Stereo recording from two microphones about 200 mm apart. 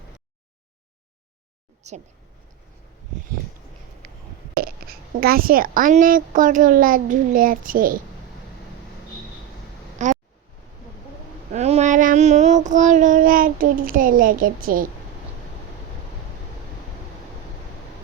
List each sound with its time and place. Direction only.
1.8 s speech: 35° right (ahead or behind)
4.5 s a woman's voice: 50° right (ahead or behind)
10.0 s a sound: 35° right (ahead or behind)
11.5 s child singing: 35° right (ahead or behind)